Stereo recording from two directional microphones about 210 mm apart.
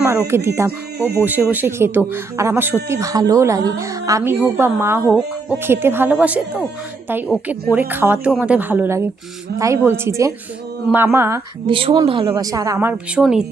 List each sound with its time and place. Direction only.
0.0 s speech: 10° right (ahead or behind)
7.7 s speech: 10° right (ahead or behind)
11.6 s speech: 25° right (ahead or behind); by 13.4 s 5° right (ahead or behind)